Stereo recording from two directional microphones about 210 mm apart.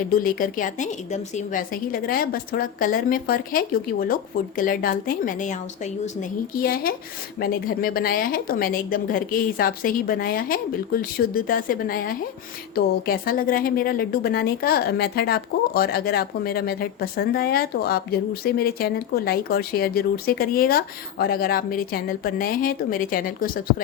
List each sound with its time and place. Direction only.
0.1 s a woman's voice: 45° left (ahead or behind)